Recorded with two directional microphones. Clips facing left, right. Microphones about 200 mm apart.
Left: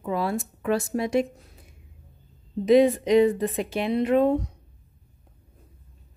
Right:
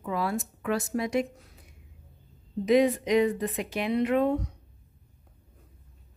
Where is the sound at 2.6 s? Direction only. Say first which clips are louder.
Left 4 dB; 30° left (ahead or behind).